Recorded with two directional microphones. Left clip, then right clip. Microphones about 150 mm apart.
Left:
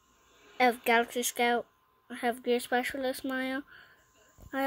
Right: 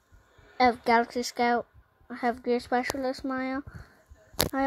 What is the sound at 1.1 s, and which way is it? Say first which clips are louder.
Speech: right 2 dB; 30° right (ahead or behind).